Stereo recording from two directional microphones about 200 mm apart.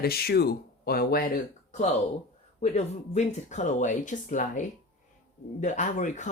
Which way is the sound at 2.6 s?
35° left (ahead or behind).